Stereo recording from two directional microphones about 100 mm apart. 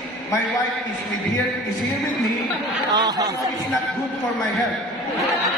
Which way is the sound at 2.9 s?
40° right (ahead or behind).